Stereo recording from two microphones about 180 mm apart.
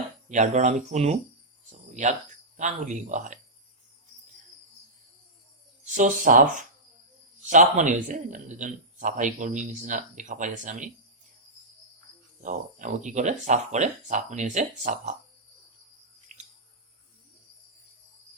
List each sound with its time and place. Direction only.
0.3 s speech: 45° right (ahead or behind)
1.9 s cricket: 40° right (ahead or behind)
2.6 s speech: 45° right (ahead or behind)
5.8 s speech: 45° right (ahead or behind)
12.4 s speech: 45° right (ahead or behind)
16.3 s a sound: 40° right (ahead or behind)